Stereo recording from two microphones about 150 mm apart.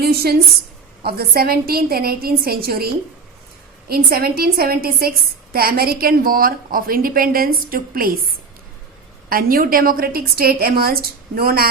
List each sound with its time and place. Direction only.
0.0 s a woman's voice: 90° right
9.3 s a woman's voice: 75° right (ahead or behind); by 11.7 s 90° right